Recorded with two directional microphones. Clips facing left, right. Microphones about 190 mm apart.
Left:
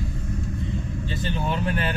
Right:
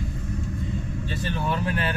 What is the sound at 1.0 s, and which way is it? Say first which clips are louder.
Speech: even; 20° left (ahead or behind).